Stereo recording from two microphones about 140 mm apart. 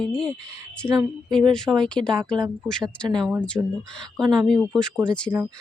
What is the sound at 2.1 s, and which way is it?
Speech, 35° right (ahead or behind).